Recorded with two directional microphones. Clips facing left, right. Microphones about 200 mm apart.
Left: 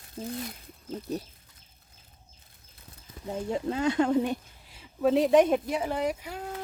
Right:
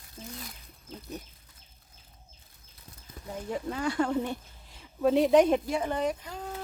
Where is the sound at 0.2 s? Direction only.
30° left (ahead or behind).